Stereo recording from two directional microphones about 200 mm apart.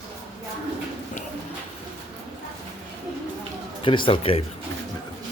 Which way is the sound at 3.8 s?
25° left (ahead or behind).